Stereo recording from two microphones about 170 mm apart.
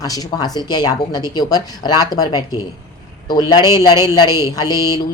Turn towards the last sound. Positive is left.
turn(degrees=20)  # may be behind; listen again after turning